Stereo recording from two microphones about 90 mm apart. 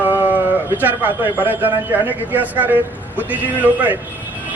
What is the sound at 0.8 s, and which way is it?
A man's voice, 20° right (ahead or behind).